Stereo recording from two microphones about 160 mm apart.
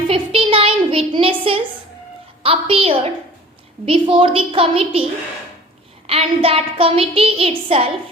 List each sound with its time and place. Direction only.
0.1 s a sound: 35° right (ahead or behind)
2.4 s child singing: 35° right (ahead or behind)
6.1 s child singing: 35° right (ahead or behind)